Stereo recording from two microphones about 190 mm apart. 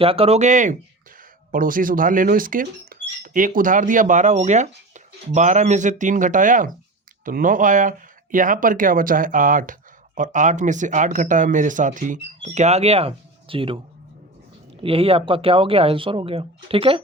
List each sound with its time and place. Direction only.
0.0 s speech: 30° right (ahead or behind)